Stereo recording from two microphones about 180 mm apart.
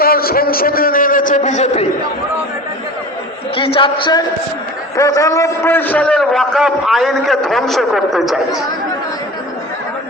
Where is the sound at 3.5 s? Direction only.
30° left (ahead or behind); by 8.5 s centre (ahead or behind).